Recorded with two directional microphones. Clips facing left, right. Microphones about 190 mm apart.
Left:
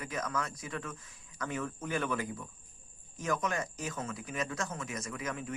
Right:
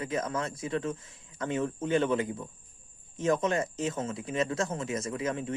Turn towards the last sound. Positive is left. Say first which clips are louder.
# right 7 dB
turn(degrees=-30)  # may be behind; listen again after turning